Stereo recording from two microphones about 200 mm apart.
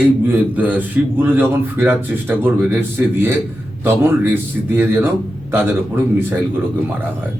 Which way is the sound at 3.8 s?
10° right (ahead or behind).